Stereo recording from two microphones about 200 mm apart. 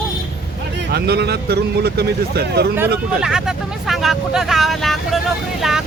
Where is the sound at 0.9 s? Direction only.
55° right (ahead or behind).